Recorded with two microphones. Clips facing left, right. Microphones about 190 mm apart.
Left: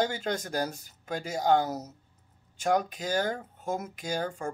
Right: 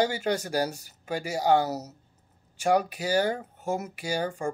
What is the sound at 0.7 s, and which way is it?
Speech, 70° right (ahead or behind).